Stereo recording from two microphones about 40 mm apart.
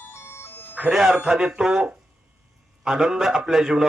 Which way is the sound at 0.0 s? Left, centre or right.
Left.